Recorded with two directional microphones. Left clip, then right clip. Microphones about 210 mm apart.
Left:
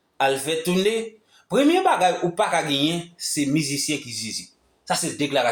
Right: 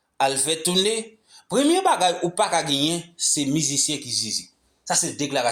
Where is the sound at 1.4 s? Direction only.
30° right (ahead or behind).